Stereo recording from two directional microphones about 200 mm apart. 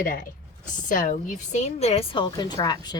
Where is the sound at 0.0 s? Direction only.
45° left (ahead or behind).